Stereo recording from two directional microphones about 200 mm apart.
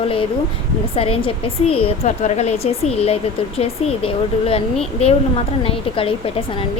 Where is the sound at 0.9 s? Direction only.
30° left (ahead or behind).